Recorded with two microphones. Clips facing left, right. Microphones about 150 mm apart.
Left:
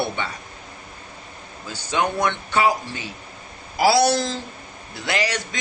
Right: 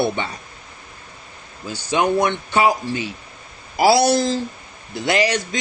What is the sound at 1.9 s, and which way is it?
Speech, 15° right (ahead or behind).